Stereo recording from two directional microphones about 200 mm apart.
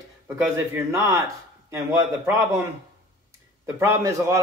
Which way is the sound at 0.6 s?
15° right (ahead or behind).